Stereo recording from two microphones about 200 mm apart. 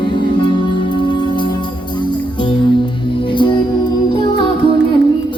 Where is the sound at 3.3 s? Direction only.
25° left (ahead or behind).